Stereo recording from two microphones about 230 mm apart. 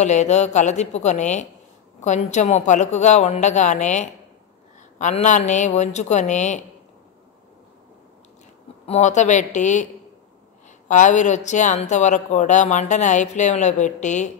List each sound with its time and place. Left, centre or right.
0.0 s speech: left
8.8 s speech: left
10.9 s speech: left